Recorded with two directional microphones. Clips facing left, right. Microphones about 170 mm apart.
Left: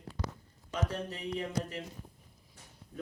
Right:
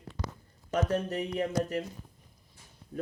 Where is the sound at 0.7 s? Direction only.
45° right (ahead or behind).